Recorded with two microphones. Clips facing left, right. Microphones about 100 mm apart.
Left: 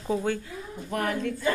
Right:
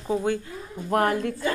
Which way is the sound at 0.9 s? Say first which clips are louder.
Right 7 dB; 65° right (ahead or behind).